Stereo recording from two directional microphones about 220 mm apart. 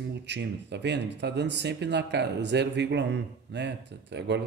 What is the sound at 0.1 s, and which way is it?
Speech, 50° right (ahead or behind).